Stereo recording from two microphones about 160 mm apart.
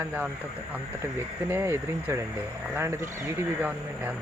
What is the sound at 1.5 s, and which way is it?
Speech, 15° right (ahead or behind).